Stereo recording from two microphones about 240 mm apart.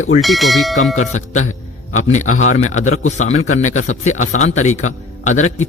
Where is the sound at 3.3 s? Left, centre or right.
Left.